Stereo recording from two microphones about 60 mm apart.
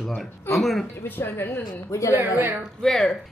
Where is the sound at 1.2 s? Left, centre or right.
Left.